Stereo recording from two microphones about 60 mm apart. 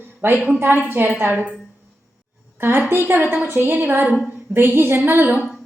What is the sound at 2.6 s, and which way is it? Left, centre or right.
Speech, right.